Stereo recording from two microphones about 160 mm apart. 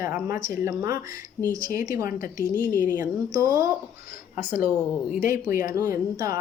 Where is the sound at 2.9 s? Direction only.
20° right (ahead or behind).